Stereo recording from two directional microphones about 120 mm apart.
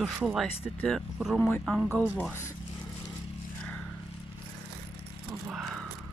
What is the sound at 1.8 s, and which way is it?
Speech, 15° right (ahead or behind).